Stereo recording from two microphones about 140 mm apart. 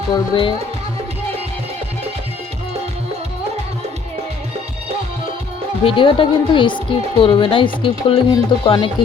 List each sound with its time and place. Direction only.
0.1 s a woman's voice: 35° left (ahead or behind)
5.8 s a woman's voice: 40° left (ahead or behind)